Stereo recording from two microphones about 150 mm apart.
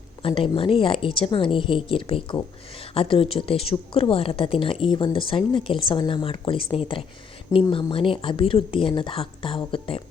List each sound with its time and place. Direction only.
0.2 s a woman's voice: 35° left (ahead or behind)